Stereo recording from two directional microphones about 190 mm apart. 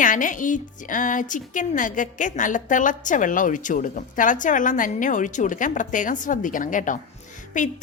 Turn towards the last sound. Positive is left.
turn(degrees=40)  # may be behind; listen again after turning